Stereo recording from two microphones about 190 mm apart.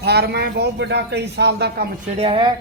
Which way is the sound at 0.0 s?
60° right (ahead or behind).